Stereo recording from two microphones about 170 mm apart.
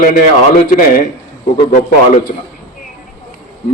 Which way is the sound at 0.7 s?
55° left (ahead or behind).